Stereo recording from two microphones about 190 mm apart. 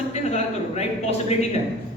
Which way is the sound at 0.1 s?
35° left (ahead or behind).